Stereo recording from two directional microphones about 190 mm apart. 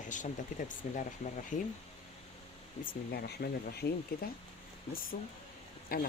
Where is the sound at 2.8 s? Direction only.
55° left (ahead or behind).